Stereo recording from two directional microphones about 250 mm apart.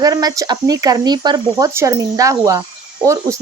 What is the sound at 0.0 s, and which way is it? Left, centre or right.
Speech, centre.